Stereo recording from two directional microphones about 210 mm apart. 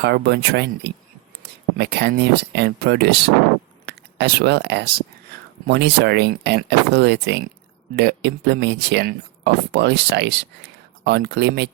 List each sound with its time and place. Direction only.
0.0 s speech: 55° right (ahead or behind)